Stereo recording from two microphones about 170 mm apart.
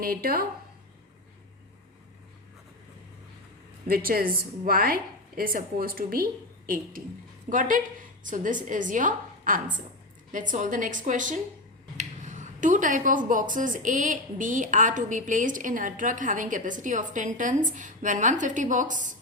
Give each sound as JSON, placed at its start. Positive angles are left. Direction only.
{"t": 0.0, "sound": "a woman's voice", "side_deg": -60}
{"t": 3.8, "sound": "a woman's voice", "side_deg": -60}